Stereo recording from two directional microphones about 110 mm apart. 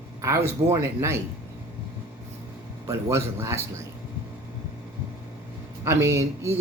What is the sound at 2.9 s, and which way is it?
Speech, 25° right (ahead or behind).